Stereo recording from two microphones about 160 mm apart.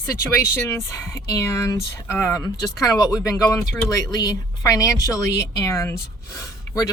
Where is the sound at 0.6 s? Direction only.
20° left (ahead or behind).